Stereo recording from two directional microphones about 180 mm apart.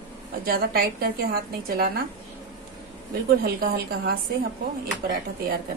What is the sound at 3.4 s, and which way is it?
Speech, 60° right (ahead or behind).